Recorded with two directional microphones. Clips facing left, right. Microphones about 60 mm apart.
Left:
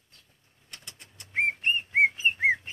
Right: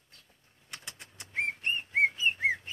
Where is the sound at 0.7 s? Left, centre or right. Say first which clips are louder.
Right 3 dB; centre.